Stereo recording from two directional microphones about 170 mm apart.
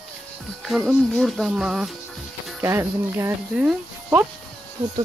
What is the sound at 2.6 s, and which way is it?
Speech, 15° right (ahead or behind).